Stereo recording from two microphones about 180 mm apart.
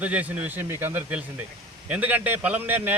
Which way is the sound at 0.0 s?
10° right (ahead or behind).